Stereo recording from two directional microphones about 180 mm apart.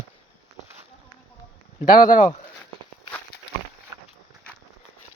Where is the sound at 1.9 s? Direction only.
45° left (ahead or behind).